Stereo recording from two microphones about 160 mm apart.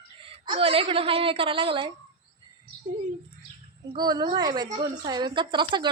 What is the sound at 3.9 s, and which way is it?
A woman's voice, 25° right (ahead or behind).